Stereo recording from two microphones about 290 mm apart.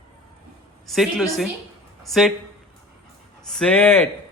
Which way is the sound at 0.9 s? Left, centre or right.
Centre.